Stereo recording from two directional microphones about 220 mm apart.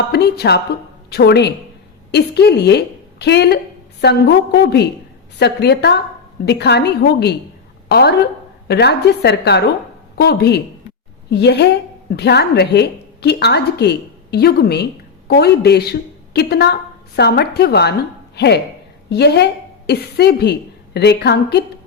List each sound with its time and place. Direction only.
0.1 s a woman's voice: 50° left (ahead or behind)